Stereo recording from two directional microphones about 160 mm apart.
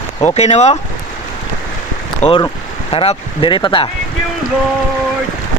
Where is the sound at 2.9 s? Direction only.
35° left (ahead or behind).